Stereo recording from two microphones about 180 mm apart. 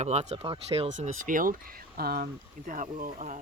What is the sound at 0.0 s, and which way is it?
Speech, 35° right (ahead or behind).